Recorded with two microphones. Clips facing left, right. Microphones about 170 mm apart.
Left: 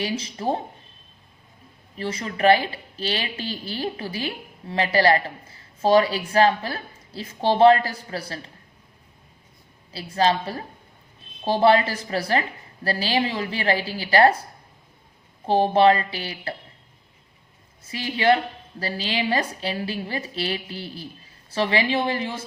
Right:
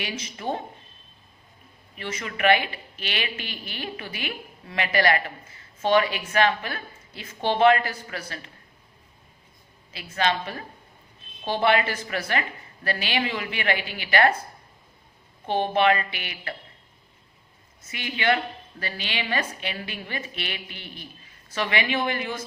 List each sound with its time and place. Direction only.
0.0 s a woman's voice: 35° left (ahead or behind)
2.0 s a woman's voice: 35° left (ahead or behind)
9.9 s a woman's voice: 35° left (ahead or behind)
15.4 s a woman's voice: 35° left (ahead or behind)
17.8 s a woman's voice: 35° left (ahead or behind)